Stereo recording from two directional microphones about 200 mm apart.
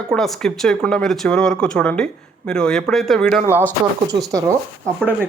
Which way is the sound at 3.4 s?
10° right (ahead or behind).